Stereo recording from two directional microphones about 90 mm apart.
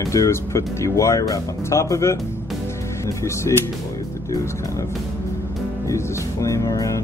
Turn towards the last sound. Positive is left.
turn(degrees=35)  # may be behind; listen again after turning